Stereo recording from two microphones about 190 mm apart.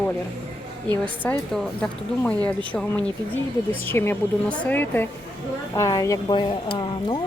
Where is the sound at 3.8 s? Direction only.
10° left (ahead or behind).